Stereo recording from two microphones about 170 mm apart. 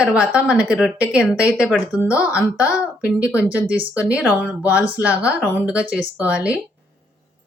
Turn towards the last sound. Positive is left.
turn(degrees=-5)  # may be behind; listen again after turning